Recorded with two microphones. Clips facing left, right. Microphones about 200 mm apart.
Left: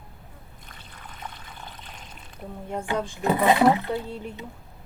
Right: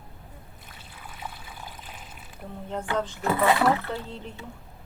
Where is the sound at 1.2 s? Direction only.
5° right (ahead or behind).